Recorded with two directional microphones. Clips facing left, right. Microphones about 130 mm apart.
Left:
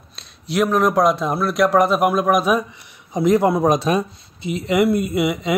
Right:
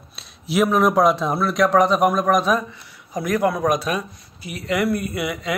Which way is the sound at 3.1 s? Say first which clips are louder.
Left 5 dB; 25° left (ahead or behind).